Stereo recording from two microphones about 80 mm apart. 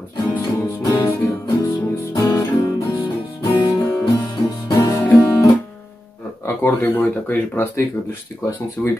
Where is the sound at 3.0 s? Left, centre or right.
Left.